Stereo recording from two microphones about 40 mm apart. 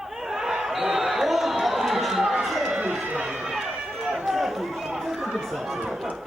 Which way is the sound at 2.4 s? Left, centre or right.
Centre.